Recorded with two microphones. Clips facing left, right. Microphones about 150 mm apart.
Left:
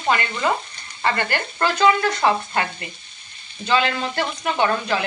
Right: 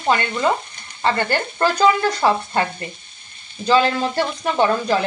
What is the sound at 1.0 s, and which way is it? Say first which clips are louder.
Speech: right 3 dB; 35° right (ahead or behind).